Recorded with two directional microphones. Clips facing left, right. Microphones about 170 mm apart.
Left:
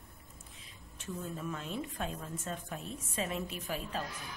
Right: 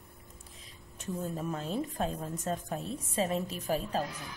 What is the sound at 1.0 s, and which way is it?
A woman's voice, 40° right (ahead or behind).